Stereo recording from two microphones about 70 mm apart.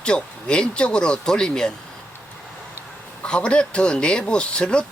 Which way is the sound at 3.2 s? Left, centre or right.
Centre.